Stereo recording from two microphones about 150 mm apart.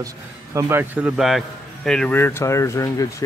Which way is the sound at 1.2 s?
Centre (ahead or behind).